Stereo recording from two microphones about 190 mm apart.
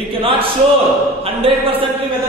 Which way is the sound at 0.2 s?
30° right (ahead or behind).